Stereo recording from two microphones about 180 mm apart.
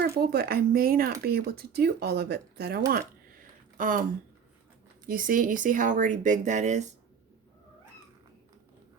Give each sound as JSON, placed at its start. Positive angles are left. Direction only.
{"t": 0.0, "sound": "speech", "side_deg": -60}
{"t": 2.9, "sound": "a sound", "side_deg": -50}
{"t": 5.0, "sound": "speech", "side_deg": -50}